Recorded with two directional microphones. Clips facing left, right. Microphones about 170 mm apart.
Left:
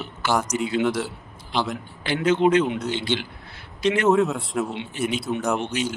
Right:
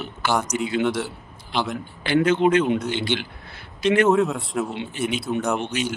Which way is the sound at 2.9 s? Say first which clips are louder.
Right 1 dB; 55° right (ahead or behind).